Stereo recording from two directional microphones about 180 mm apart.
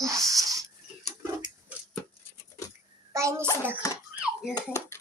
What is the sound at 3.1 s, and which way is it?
Speech, 15° right (ahead or behind).